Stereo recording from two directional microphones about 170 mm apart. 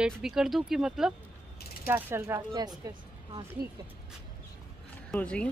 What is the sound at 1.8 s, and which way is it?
Speech, 15° right (ahead or behind).